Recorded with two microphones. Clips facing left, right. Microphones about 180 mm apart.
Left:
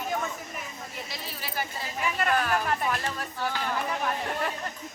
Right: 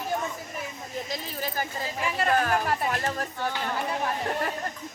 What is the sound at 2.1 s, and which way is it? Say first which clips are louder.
Speech: right 2 dB; 30° right (ahead or behind).